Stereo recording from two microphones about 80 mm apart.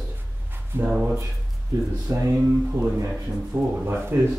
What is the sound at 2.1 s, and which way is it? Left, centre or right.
Speech, right.